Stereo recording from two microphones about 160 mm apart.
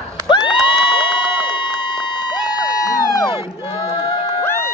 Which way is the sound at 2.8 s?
25° left (ahead or behind).